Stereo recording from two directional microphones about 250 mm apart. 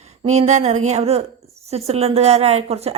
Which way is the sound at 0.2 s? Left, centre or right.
Right.